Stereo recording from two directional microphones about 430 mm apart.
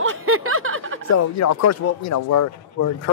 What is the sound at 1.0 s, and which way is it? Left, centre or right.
A man's voice, left.